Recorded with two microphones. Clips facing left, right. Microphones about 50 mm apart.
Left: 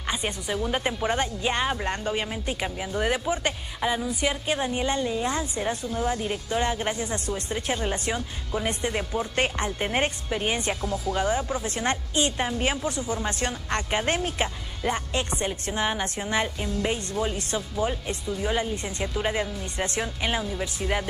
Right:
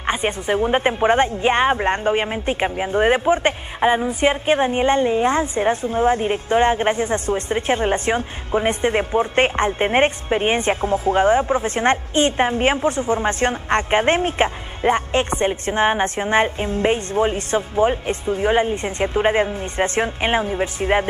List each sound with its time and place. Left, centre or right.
0.0 s speech: right